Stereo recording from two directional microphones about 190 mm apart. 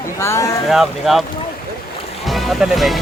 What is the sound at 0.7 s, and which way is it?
Speech, centre (ahead or behind).